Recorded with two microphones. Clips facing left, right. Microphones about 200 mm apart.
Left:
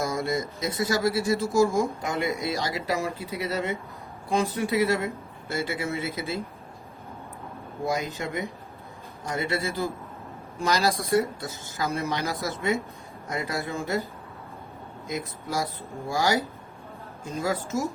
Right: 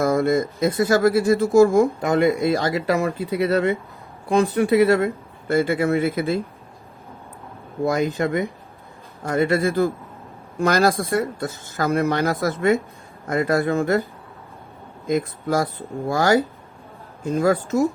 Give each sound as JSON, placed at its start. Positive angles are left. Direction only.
{"t": 0.0, "sound": "speech", "side_deg": -60}
{"t": 7.9, "sound": "speech", "side_deg": -55}